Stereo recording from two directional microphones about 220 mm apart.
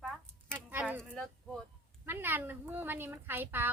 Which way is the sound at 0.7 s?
10° right (ahead or behind).